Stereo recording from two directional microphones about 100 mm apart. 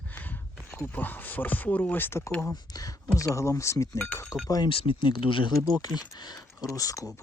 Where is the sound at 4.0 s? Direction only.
20° left (ahead or behind).